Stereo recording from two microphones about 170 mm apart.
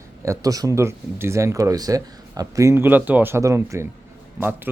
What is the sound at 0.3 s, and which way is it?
Speech, 20° right (ahead or behind).